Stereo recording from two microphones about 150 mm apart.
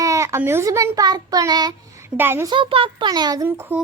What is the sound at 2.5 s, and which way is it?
A child's voice, 35° right (ahead or behind).